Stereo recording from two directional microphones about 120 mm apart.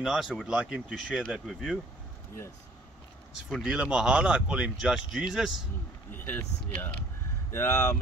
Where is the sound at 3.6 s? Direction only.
10° right (ahead or behind).